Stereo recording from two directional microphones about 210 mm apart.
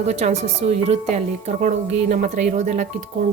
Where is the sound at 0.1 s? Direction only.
30° right (ahead or behind).